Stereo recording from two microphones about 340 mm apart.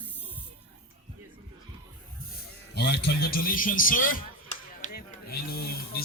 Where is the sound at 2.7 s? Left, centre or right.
Left.